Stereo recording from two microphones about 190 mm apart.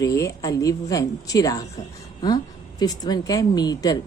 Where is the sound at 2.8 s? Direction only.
20° left (ahead or behind).